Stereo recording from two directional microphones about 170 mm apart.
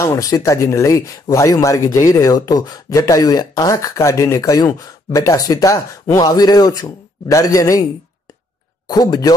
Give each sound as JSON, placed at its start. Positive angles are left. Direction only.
{"t": 0.0, "sound": "speech", "side_deg": 20}
{"t": 8.8, "sound": "speech", "side_deg": 25}